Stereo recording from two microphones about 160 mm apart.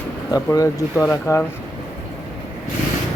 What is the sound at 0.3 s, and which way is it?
Speech, 20° left (ahead or behind).